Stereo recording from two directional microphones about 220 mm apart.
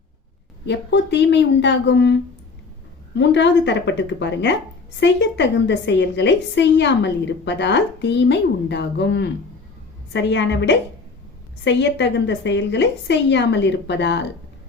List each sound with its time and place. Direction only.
0.6 s a woman's voice: 50° left (ahead or behind)
3.2 s a woman's voice: 55° left (ahead or behind)